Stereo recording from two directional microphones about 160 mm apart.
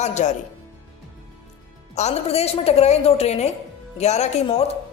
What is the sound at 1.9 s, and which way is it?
A woman's voice, 40° left (ahead or behind).